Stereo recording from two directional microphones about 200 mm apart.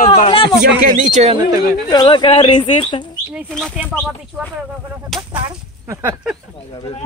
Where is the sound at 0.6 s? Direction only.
50° right (ahead or behind); by 1.4 s 35° right (ahead or behind).